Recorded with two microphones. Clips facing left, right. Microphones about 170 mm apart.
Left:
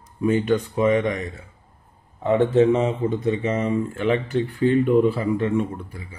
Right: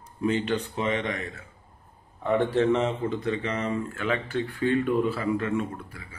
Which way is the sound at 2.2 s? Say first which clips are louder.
Left 6 dB; 20° left (ahead or behind).